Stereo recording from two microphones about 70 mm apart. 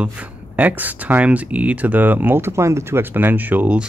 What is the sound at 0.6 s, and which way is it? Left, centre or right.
Speech, right.